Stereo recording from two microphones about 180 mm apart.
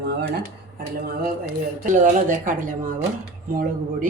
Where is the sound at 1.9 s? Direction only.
45° right (ahead or behind).